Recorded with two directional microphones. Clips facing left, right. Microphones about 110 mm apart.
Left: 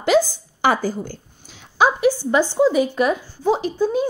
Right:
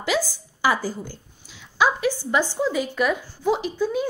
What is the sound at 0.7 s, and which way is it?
Speech, 55° left (ahead or behind).